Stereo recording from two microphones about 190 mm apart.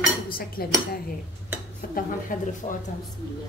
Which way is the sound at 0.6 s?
50° left (ahead or behind).